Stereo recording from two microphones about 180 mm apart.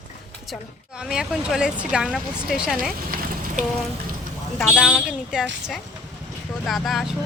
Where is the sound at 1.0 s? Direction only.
5° right (ahead or behind).